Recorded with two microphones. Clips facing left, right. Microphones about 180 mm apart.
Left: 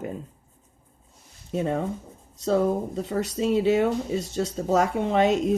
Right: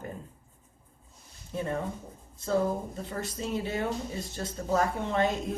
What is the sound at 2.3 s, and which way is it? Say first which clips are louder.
Speech: left 5 dB; 75° left (ahead or behind).